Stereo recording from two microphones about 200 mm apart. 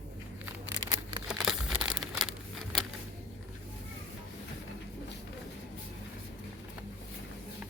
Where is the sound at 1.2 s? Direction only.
5° right (ahead or behind).